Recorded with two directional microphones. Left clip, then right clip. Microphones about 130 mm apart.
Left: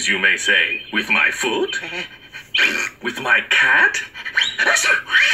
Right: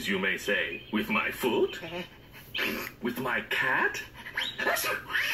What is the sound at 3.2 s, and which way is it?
Speech, 35° left (ahead or behind).